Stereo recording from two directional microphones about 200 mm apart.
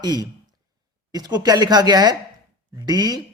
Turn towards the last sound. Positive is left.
turn(degrees=-20)  # may be behind; listen again after turning